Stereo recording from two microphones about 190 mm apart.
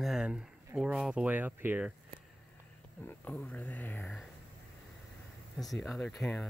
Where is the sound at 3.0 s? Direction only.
10° left (ahead or behind).